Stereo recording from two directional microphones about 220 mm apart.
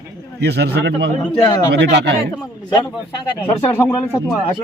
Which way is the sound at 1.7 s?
50° right (ahead or behind).